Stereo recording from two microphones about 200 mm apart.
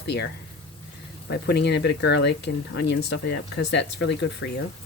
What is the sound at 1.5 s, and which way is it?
Speech, 60° left (ahead or behind).